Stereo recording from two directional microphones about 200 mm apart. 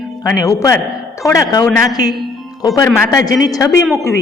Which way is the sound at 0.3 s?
15° left (ahead or behind).